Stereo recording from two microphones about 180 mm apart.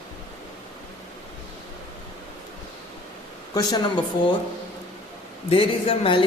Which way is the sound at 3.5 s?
20° left (ahead or behind).